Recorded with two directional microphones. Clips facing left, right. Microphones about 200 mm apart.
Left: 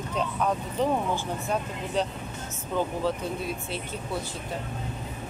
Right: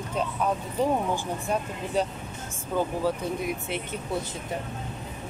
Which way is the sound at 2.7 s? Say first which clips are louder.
Right 1 dB; 15° right (ahead or behind).